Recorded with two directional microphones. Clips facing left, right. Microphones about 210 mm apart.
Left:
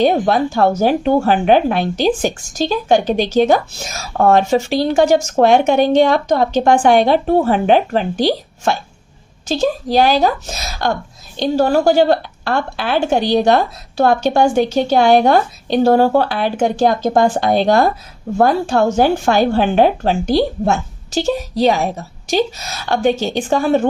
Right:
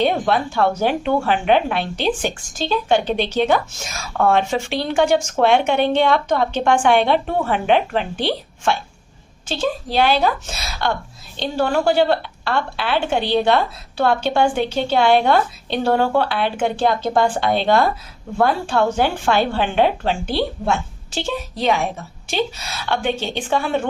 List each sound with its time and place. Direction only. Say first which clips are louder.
0.0 s a woman's voice: left 5 dB; 40° left (ahead or behind)